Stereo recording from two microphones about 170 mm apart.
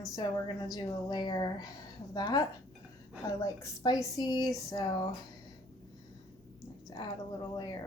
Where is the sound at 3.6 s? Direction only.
20° left (ahead or behind).